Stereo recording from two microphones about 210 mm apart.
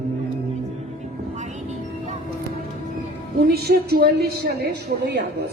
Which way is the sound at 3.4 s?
50° right (ahead or behind).